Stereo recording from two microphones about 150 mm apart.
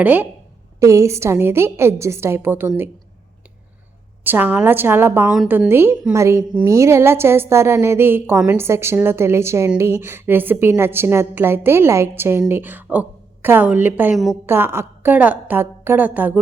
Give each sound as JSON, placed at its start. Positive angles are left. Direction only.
{"t": 0.0, "sound": "a woman's voice", "side_deg": -10}
{"t": 4.2, "sound": "a woman's voice", "side_deg": -15}